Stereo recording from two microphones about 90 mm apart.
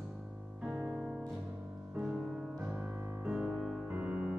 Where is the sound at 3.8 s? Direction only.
20° right (ahead or behind).